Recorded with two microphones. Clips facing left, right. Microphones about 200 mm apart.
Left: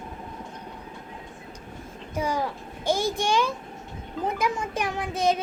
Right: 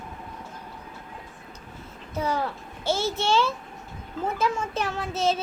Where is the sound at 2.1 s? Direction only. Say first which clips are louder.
Even; 10° left (ahead or behind).